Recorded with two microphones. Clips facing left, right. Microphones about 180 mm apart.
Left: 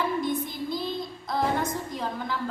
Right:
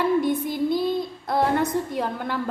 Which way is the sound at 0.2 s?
65° right (ahead or behind).